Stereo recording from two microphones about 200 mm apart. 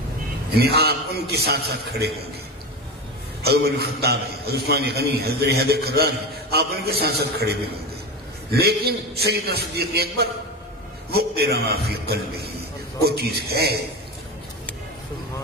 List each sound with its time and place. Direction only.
0.6 s a man's voice: 50° right (ahead or behind)
3.4 s a man's voice: 50° right (ahead or behind)
8.5 s a man's voice: 50° right (ahead or behind)
13.0 s a man's voice: 50° right (ahead or behind)